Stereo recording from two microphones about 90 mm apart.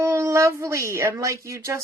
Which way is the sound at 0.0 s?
30° right (ahead or behind).